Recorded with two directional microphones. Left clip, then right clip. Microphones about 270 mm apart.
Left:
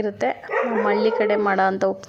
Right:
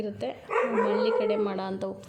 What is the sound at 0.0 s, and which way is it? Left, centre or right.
Speech, centre.